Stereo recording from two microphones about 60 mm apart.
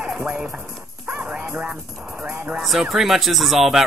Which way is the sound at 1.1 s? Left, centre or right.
Centre.